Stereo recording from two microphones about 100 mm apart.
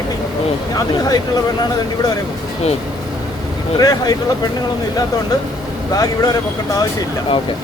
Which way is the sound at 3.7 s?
40° left (ahead or behind).